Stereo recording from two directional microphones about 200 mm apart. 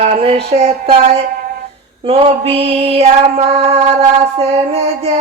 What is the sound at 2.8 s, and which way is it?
Mantra, 30° right (ahead or behind).